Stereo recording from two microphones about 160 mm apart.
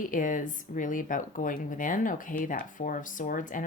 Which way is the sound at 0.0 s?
55° left (ahead or behind).